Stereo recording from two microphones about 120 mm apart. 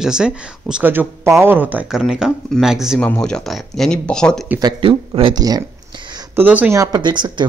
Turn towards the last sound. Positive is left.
turn(degrees=-40)  # may be behind; listen again after turning